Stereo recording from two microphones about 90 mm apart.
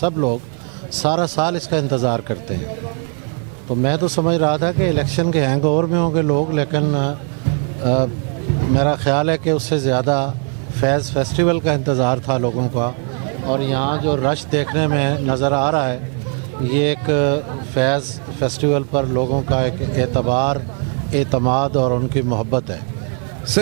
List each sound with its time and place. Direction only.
0.0 s speech: 20° right (ahead or behind)
3.7 s speech: 15° right (ahead or behind)